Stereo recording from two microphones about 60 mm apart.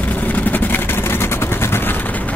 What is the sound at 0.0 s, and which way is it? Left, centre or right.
Vehicle, left.